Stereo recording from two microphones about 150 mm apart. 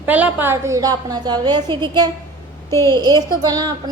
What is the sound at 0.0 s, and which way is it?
A woman's voice, 10° right (ahead or behind).